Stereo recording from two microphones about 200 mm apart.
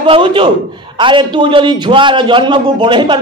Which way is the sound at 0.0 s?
25° right (ahead or behind).